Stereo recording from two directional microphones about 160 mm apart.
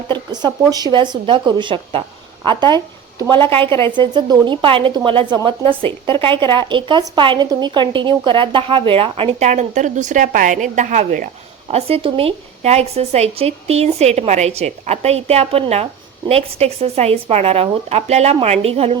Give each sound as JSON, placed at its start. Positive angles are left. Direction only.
{"t": 0.1, "sound": "speech", "side_deg": -25}
{"t": 3.7, "sound": "a woman's voice", "side_deg": 15}
{"t": 3.9, "sound": "a woman's voice", "side_deg": -30}
{"t": 11.7, "sound": "a woman's voice", "side_deg": -35}